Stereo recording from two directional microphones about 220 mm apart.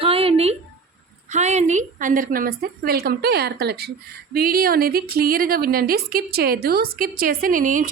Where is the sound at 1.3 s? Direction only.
30° right (ahead or behind).